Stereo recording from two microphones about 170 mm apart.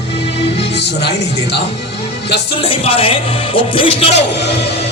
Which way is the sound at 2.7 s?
35° left (ahead or behind).